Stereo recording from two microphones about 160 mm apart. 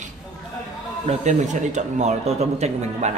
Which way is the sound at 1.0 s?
50° right (ahead or behind).